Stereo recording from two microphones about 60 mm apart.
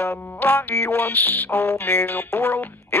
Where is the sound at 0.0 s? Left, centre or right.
Left.